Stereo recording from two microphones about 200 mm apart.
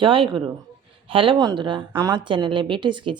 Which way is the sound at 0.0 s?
25° right (ahead or behind).